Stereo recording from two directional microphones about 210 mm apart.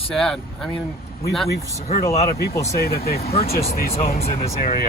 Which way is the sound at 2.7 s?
50° left (ahead or behind).